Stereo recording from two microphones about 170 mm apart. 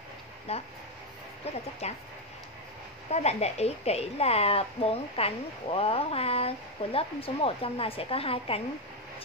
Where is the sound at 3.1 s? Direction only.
40° left (ahead or behind).